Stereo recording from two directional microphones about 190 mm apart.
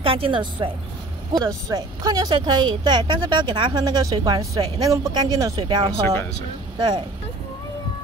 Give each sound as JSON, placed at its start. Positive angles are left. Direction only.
{"t": 0.0, "sound": "speech", "side_deg": -30}